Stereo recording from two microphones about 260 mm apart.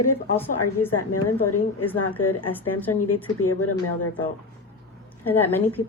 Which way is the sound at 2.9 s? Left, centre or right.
Left.